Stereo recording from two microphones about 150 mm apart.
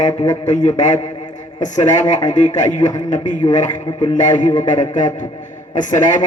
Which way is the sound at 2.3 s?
55° left (ahead or behind).